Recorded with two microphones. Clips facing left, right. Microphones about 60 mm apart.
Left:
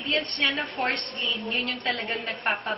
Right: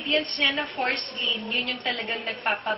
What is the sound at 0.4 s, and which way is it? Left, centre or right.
A woman's voice, centre.